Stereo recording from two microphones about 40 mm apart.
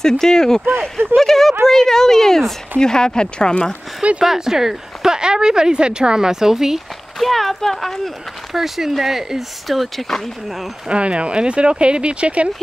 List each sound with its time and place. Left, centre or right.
0.0 s speech: centre
4.2 s speech: centre
7.2 s speech: centre
8.5 s speech: centre
10.9 s speech: right